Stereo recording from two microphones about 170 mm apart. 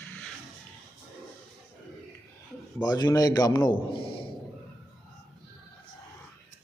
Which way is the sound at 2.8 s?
25° left (ahead or behind).